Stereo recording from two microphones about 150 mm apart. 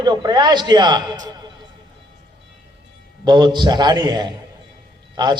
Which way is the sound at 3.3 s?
30° right (ahead or behind).